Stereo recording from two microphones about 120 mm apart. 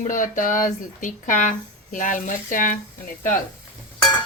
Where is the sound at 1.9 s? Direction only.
90° left.